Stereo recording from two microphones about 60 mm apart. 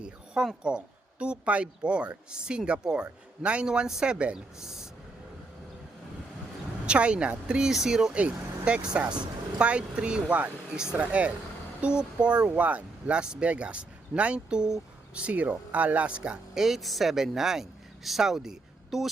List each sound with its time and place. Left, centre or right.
0.4 s speech: centre
6.8 s speech: centre
16.6 s speech: centre